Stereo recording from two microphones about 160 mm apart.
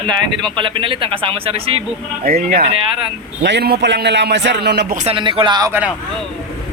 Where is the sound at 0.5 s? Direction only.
30° right (ahead or behind).